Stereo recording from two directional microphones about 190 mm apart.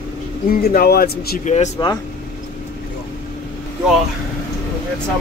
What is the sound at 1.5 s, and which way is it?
Speech, 35° left (ahead or behind).